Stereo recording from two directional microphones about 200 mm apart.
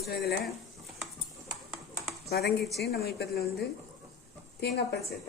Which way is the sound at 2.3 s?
55° left (ahead or behind).